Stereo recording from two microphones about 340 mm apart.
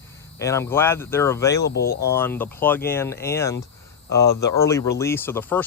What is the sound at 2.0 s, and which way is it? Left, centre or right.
Speech, centre.